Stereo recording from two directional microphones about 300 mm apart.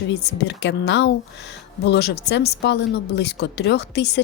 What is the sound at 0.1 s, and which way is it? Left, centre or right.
A woman's voice, left.